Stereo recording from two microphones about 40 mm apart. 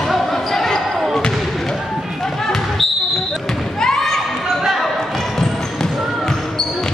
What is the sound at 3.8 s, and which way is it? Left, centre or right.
Thump, centre.